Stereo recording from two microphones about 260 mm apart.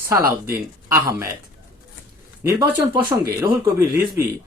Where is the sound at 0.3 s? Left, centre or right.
Centre.